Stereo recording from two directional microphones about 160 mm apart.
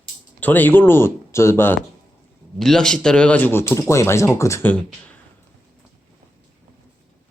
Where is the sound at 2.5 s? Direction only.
Centre (ahead or behind).